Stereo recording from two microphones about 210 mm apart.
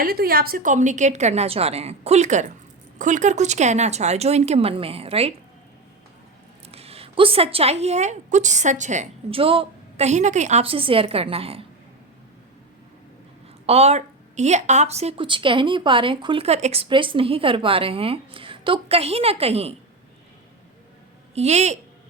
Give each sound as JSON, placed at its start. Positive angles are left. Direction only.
{"t": 0.0, "sound": "a woman's voice", "side_deg": -45}
{"t": 6.7, "sound": "speech", "side_deg": -30}
{"t": 13.7, "sound": "speech", "side_deg": -30}
{"t": 21.3, "sound": "a woman's voice", "side_deg": -30}